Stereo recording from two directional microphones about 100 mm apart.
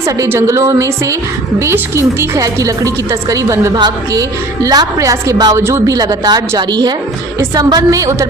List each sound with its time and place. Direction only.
0.0 s a woman's voice: 25° right (ahead or behind)
3.7 s a woman's voice: 40° right (ahead or behind); by 5.9 s 25° right (ahead or behind)
5.9 s speech: 40° right (ahead or behind)